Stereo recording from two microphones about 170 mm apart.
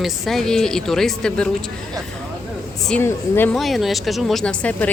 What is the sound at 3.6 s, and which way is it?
A man's voice, centre (ahead or behind).